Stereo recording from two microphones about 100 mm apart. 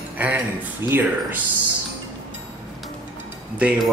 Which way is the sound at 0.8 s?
20° right (ahead or behind).